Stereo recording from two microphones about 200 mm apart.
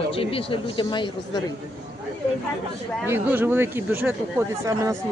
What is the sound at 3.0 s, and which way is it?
Speech, 10° right (ahead or behind).